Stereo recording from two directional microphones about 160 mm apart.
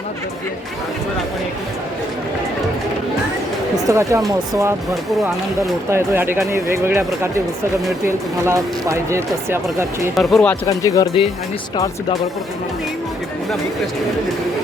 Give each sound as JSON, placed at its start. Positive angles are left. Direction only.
{"t": 3.8, "sound": "speech", "side_deg": -20}
{"t": 5.9, "sound": "speech", "side_deg": -15}
{"t": 10.2, "sound": "speech", "side_deg": 0}
{"t": 10.7, "sound": "speech", "side_deg": 20}